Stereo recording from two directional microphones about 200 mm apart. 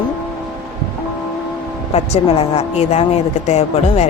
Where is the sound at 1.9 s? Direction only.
30° left (ahead or behind).